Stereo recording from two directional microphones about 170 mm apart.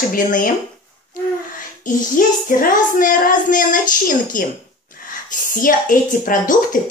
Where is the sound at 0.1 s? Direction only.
50° left (ahead or behind).